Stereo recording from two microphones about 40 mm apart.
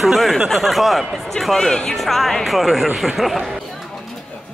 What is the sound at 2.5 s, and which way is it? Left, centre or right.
Speech, centre.